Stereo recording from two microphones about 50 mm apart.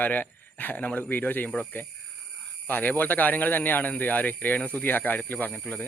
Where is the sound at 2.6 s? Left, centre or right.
Left.